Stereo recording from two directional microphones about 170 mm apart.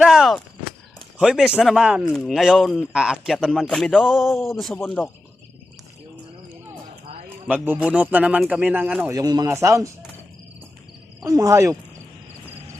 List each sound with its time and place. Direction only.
0.0 s a sound: centre (ahead or behind)
0.9 s a man's voice: 5° right (ahead or behind)
7.4 s a man's voice: 10° right (ahead or behind)
9.1 s speech: 20° right (ahead or behind)
11.3 s speech: 20° right (ahead or behind)